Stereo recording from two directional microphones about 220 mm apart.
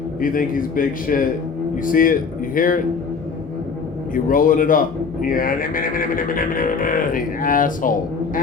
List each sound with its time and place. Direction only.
0.2 s speech: 40° left (ahead or behind)
4.1 s speech: 40° left (ahead or behind)